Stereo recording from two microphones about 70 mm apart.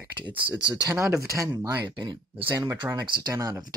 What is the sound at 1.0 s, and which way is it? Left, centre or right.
Speech, right.